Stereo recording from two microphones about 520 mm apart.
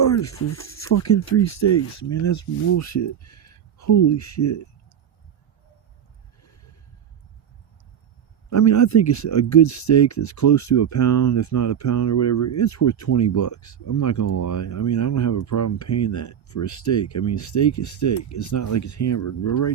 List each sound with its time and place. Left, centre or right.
0.0 s speech: left
6.4 s a sound: left
8.4 s speech: left